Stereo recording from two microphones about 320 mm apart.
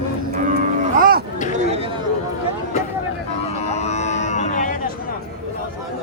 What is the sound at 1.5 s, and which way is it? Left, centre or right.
Chatter, centre.